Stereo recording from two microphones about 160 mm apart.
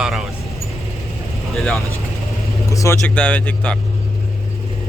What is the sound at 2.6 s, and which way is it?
Vehicle, 20° left (ahead or behind).